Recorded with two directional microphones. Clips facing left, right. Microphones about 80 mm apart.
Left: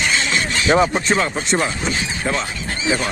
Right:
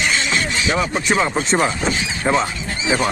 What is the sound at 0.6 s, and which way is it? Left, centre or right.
Speech, left.